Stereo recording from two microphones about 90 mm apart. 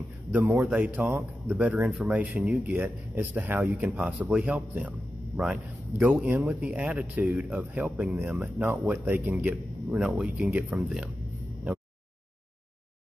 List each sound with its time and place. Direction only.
0.3 s a man's voice: 30° right (ahead or behind)
0.6 s speech: 15° right (ahead or behind)
1.9 s speech: 5° right (ahead or behind)
2.1 s a man's voice: 15° right (ahead or behind)
9.9 s speech: 10° right (ahead or behind)